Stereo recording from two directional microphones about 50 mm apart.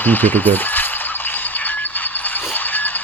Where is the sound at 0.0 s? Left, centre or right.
Left.